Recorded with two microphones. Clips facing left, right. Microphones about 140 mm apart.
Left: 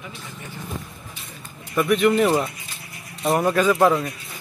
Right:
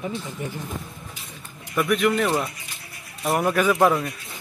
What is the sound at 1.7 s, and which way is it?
Speech, centre (ahead or behind).